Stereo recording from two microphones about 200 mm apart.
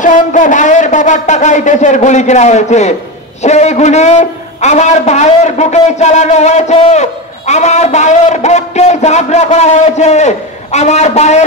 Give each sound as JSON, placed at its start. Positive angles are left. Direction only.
{"t": 0.0, "sound": "a man's voice", "side_deg": 40}